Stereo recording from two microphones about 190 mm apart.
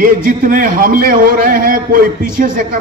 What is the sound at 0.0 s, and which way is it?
A man's voice, 45° right (ahead or behind).